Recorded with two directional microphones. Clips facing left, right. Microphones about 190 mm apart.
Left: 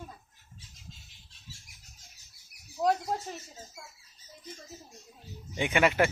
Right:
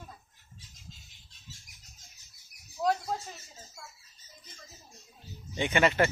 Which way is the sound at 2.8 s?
30° left (ahead or behind).